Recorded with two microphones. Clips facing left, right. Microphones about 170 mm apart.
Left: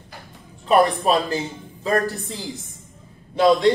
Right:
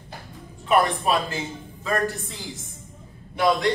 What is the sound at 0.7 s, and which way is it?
A man's voice, 35° left (ahead or behind).